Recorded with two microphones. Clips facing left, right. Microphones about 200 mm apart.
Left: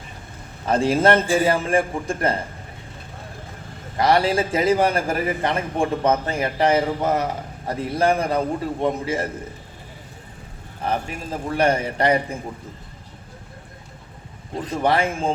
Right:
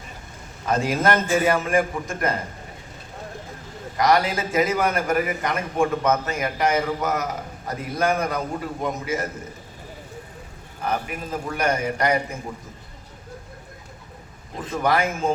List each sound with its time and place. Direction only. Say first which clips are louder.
0.6 s a man's voice: left 4 dB; 30° left (ahead or behind)
3.9 s a man's voice: left 2 dB; 30° left (ahead or behind)
10.8 s a man's voice: left 1 dB; 30° left (ahead or behind)
14.6 s a man's voice: left 1 dB; 30° left (ahead or behind)